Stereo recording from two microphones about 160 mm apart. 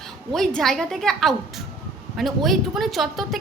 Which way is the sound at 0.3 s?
Centre (ahead or behind).